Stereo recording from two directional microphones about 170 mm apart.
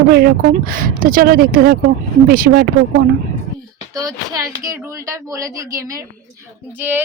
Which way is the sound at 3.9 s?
20° right (ahead or behind).